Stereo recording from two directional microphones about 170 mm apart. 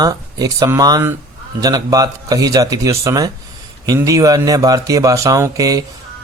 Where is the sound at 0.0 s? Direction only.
20° right (ahead or behind).